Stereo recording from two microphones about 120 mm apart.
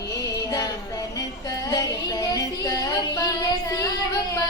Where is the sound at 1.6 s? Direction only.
30° left (ahead or behind).